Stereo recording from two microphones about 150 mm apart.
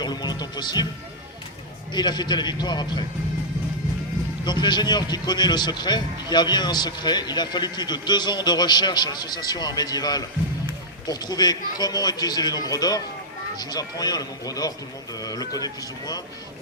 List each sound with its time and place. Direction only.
0.0 s music: 30° left (ahead or behind)
1.9 s a man's voice: 30° left (ahead or behind)
4.4 s a man's voice: 30° left (ahead or behind)